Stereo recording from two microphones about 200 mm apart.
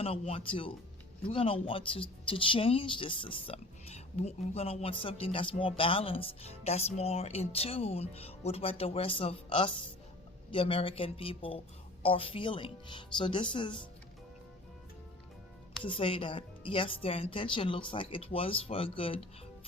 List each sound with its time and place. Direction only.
0.0 s speech: 30° left (ahead or behind)
15.8 s speech: 25° left (ahead or behind)